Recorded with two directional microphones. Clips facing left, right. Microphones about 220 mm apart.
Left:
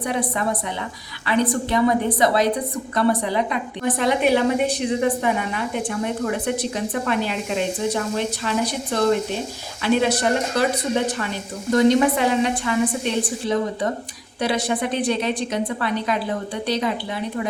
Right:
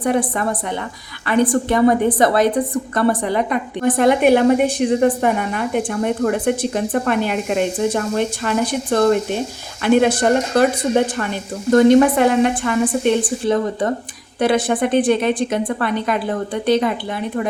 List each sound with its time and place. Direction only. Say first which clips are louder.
0.0 s a woman's voice: right 5 dB; 50° right (ahead or behind)